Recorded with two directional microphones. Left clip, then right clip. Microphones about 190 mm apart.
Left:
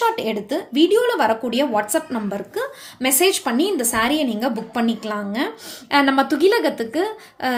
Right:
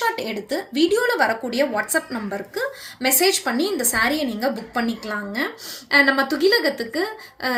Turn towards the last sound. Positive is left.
turn(degrees=50)  # may be behind; listen again after turning